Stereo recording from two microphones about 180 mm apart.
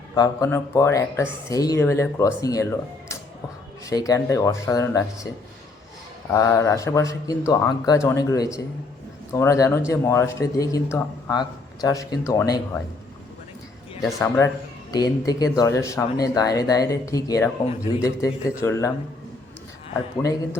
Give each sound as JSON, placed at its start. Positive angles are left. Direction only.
{"t": 0.1, "sound": "speech", "side_deg": 20}
{"t": 6.3, "sound": "speech", "side_deg": 15}
{"t": 14.0, "sound": "speech", "side_deg": 15}